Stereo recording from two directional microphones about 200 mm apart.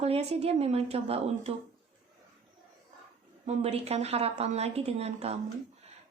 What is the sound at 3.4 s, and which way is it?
A woman's voice, 35° right (ahead or behind).